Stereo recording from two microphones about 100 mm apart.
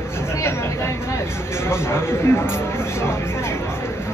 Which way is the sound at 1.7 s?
25° left (ahead or behind).